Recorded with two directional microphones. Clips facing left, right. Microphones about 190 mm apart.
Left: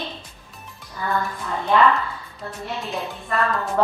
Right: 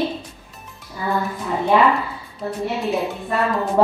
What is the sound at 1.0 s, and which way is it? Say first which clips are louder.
A woman's voice: right 2 dB; 15° right (ahead or behind).